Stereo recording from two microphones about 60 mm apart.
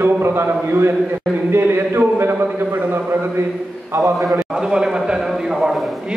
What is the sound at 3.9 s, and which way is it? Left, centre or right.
Speech, right.